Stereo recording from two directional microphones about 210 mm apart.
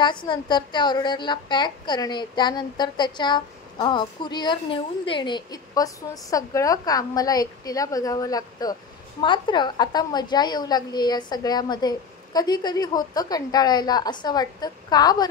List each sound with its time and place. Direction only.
0.0 s a woman's voice: 20° left (ahead or behind)